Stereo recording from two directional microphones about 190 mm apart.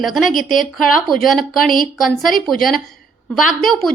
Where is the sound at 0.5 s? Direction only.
45° left (ahead or behind).